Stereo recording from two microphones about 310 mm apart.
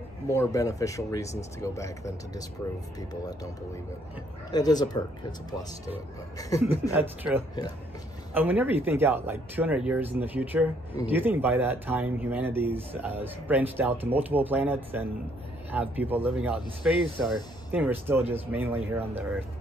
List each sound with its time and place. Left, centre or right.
0.3 s speech: centre
4.5 s speech: centre
6.9 s speech: centre